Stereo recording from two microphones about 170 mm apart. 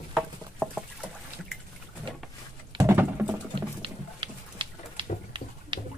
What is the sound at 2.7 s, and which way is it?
Patter, 15° right (ahead or behind).